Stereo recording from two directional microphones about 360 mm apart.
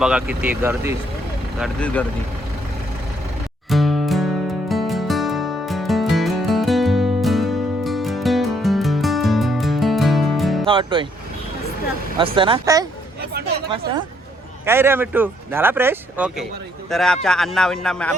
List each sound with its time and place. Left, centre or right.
0.0 s speech: centre
3.7 s music: centre
10.7 s music: centre
12.2 s speech: centre
13.3 s a sound: right
14.6 s speech: centre